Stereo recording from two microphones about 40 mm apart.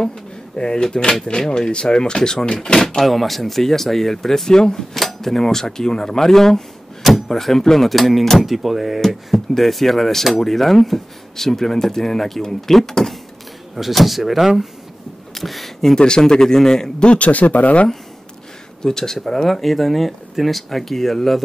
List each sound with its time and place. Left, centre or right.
0.6 s speech: left
3.1 s speech: centre
4.9 s speech: centre
7.0 s door: centre
7.2 s speech: centre
9.0 s speech: centre
13.7 s speech: centre
16.0 s speech: centre
17.0 s speech: left
18.8 s speech: centre